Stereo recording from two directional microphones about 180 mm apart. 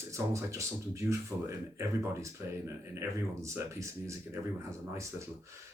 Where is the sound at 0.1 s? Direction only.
15° right (ahead or behind).